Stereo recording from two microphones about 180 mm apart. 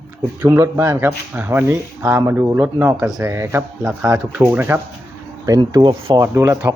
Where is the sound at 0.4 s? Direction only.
15° right (ahead or behind).